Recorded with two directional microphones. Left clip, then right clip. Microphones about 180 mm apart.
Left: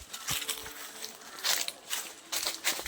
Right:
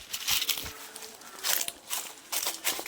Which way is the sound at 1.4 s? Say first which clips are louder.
Left 1 dB; 30° right (ahead or behind).